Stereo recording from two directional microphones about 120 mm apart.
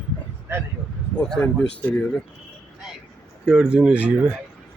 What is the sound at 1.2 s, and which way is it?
Speech, 5° left (ahead or behind).